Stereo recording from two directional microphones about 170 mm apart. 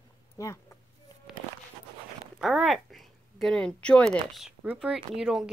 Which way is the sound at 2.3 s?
Centre (ahead or behind).